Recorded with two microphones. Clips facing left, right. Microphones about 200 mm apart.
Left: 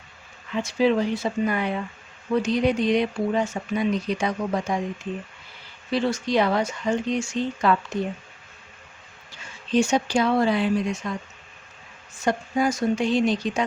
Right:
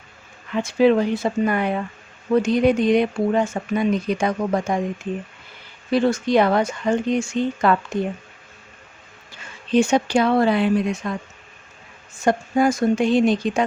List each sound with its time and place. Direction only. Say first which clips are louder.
0.5 s speech: right 5 dB; 55° right (ahead or behind)
5.9 s speech: right 5 dB; 50° right (ahead or behind)
9.7 s speech: right 4 dB; 60° right (ahead or behind)
12.2 s speech: right 5 dB; 50° right (ahead or behind)